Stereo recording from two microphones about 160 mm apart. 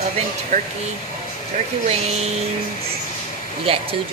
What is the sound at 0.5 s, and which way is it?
Speech, 50° right (ahead or behind).